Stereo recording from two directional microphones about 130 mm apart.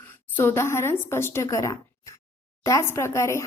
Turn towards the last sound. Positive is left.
turn(degrees=20)  # may be behind; listen again after turning